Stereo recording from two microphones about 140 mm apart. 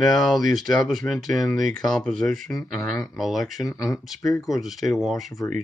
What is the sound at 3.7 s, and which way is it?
Speech, 25° left (ahead or behind).